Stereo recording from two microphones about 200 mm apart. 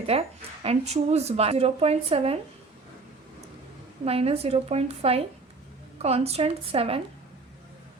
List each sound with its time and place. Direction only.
0.0 s speech: 30° right (ahead or behind)
4.0 s speech: 30° right (ahead or behind)